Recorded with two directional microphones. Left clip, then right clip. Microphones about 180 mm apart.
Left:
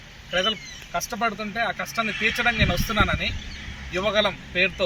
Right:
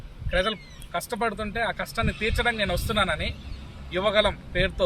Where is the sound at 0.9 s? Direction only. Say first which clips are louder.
Left 2 dB; 25° right (ahead or behind).